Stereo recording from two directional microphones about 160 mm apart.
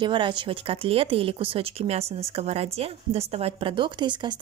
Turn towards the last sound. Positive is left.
turn(degrees=-30)  # may be behind; listen again after turning